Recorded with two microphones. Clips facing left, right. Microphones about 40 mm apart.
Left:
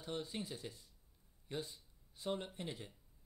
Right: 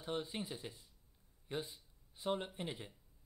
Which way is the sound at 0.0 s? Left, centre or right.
Centre.